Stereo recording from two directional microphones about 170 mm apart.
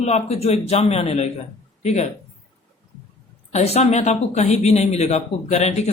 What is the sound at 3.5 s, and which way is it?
Speech, 40° left (ahead or behind).